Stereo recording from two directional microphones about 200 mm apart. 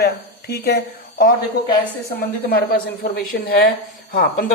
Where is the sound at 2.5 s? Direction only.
45° left (ahead or behind).